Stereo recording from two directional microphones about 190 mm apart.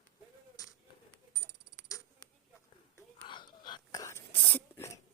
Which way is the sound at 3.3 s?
25° left (ahead or behind).